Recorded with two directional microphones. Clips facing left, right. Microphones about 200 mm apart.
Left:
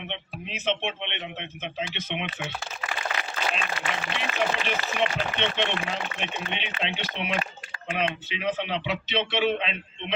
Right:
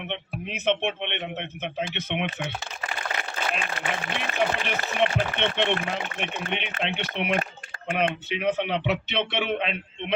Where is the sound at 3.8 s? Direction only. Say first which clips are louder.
Right 1 dB; 50° right (ahead or behind).